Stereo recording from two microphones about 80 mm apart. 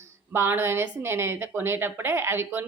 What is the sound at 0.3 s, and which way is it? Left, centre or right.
Speech, right.